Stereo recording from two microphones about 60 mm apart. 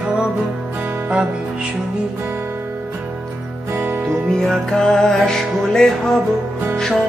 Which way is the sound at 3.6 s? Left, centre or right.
Right.